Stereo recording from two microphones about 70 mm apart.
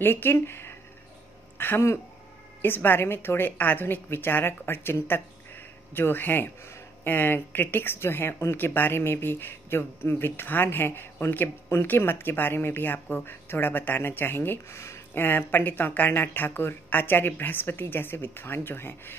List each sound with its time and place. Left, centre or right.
0.0 s a woman's voice: left